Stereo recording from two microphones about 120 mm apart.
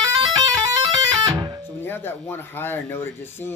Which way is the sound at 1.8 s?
15° left (ahead or behind).